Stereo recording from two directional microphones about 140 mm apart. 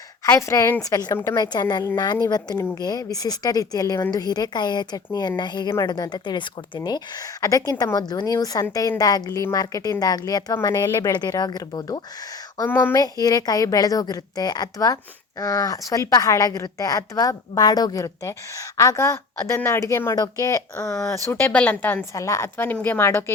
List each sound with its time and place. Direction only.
0.3 s a woman's voice: 20° left (ahead or behind)
13.0 s a woman's voice: 25° left (ahead or behind)